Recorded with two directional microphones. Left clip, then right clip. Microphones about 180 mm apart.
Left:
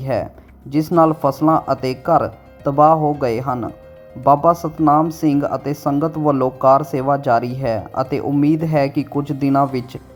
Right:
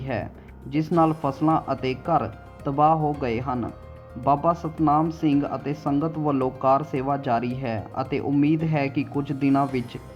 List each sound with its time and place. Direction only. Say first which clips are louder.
0.0 s speech: left 9 dB; 40° left (ahead or behind)